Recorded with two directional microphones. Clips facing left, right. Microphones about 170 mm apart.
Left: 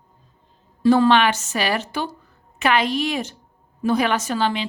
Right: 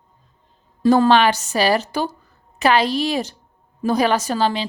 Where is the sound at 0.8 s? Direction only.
40° right (ahead or behind).